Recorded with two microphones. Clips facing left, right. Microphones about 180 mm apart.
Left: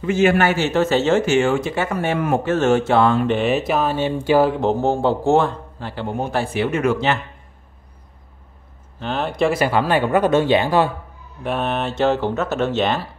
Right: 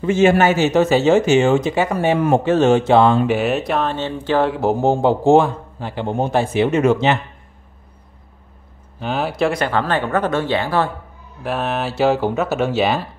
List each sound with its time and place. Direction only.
0.0 s a man's voice: 25° right (ahead or behind)
2.1 s speech: 25° right (ahead or behind)
2.5 s a man's voice: 15° right (ahead or behind)
3.3 s speech: 5° right (ahead or behind)
4.5 s a man's voice: 10° right (ahead or behind)
9.0 s speech: 10° right (ahead or behind); by 10.9 s 15° left (ahead or behind)
11.4 s a man's voice: centre (ahead or behind)